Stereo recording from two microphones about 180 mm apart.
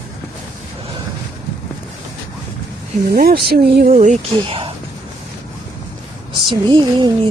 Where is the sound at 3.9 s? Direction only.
40° right (ahead or behind).